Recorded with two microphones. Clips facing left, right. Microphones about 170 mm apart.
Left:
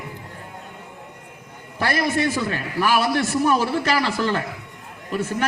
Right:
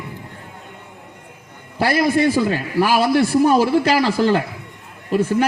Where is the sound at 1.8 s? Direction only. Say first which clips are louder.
Right 5 dB; 35° right (ahead or behind).